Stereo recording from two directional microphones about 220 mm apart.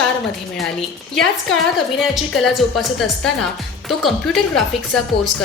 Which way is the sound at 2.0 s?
Centre (ahead or behind).